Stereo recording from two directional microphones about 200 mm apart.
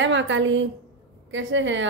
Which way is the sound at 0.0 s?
70° right (ahead or behind).